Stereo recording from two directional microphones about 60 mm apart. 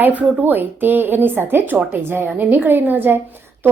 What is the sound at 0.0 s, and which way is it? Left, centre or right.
A woman's voice, right.